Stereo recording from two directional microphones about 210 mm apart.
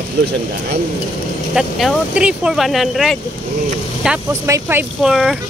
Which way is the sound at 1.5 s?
5° right (ahead or behind).